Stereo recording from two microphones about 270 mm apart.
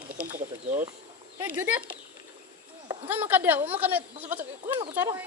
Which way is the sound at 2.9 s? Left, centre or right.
Centre.